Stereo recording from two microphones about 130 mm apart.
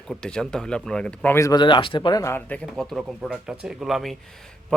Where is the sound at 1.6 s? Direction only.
40° left (ahead or behind).